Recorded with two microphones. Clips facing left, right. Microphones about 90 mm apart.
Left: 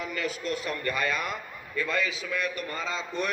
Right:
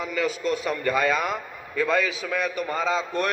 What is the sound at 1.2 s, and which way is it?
A man's voice, 90° right.